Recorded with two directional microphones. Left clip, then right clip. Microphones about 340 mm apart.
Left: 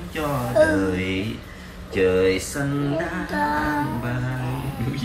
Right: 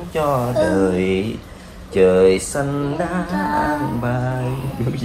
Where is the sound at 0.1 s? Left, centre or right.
Centre.